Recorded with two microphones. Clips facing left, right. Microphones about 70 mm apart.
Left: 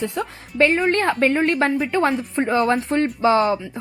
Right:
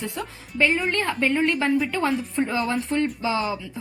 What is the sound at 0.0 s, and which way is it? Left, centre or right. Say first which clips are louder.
A woman's voice: left 6 dB; left.